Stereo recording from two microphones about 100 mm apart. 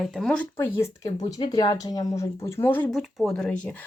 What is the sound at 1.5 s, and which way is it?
Speech, 45° left (ahead or behind).